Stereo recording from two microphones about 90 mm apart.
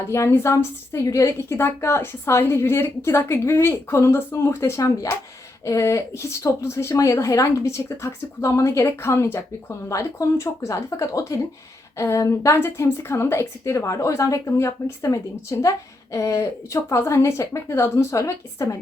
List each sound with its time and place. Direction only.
0.1 s speech: 30° left (ahead or behind)